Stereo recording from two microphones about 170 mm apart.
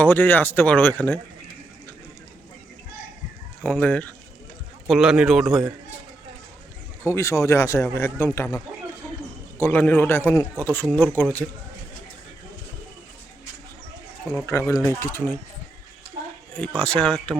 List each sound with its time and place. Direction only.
0.0 s speech: 10° left (ahead or behind)
3.6 s speech: 10° left (ahead or behind)
4.9 s speech: 5° right (ahead or behind)
7.0 s speech: 15° left (ahead or behind)
9.6 s speech: 15° left (ahead or behind)
14.3 s speech: 15° left (ahead or behind)
16.6 s speech: 5° left (ahead or behind)